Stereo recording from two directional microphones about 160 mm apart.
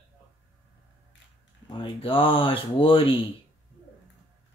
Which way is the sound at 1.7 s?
35° left (ahead or behind).